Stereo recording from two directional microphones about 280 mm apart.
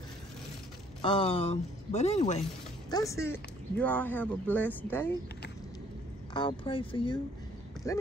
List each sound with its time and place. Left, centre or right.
1.0 s speech: centre
2.9 s speech: centre
6.3 s speech: centre